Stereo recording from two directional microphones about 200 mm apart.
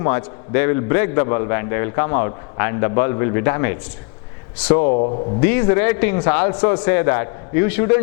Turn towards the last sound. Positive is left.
turn(degrees=10)  # may be behind; listen again after turning